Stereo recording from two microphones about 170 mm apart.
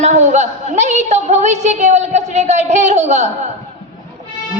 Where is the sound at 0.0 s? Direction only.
45° right (ahead or behind).